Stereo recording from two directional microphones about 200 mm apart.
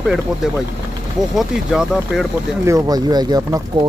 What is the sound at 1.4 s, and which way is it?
Speech, centre (ahead or behind).